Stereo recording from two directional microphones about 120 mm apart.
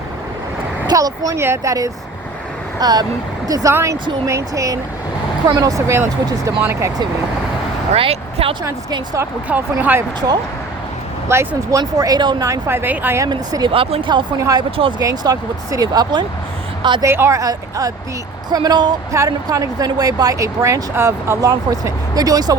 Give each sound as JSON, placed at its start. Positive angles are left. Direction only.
{"t": 0.9, "sound": "speech", "side_deg": -30}
{"t": 7.9, "sound": "speech", "side_deg": -50}
{"t": 9.5, "sound": "speech", "side_deg": -15}
{"t": 11.3, "sound": "speech", "side_deg": -20}
{"t": 11.8, "sound": "speech", "side_deg": -35}
{"t": 12.5, "sound": "speech", "side_deg": -20}
{"t": 13.2, "sound": "speech", "side_deg": -35}
{"t": 14.3, "sound": "speech", "side_deg": -30}
{"t": 14.8, "sound": "speech", "side_deg": -45}
{"t": 15.0, "sound": "speech", "side_deg": -30}
{"t": 17.0, "sound": "speech", "side_deg": -20}